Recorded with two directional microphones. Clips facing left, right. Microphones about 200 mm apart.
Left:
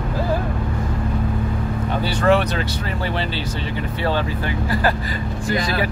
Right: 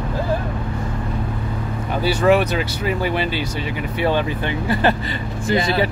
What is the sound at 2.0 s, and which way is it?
Speech, 10° right (ahead or behind).